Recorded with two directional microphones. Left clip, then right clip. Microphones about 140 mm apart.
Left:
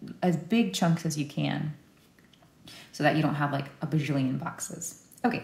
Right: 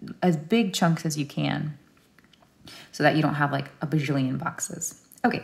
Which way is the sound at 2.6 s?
70° right (ahead or behind).